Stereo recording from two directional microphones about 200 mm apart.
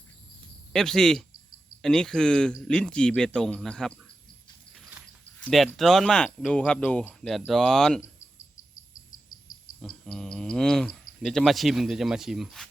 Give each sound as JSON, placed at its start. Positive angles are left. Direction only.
{"t": 0.7, "sound": "speech", "side_deg": 0}
{"t": 4.7, "sound": "a sound", "side_deg": -5}
{"t": 5.4, "sound": "speech", "side_deg": 5}
{"t": 8.7, "sound": "cricket", "side_deg": 40}
{"t": 9.8, "sound": "speech", "side_deg": 5}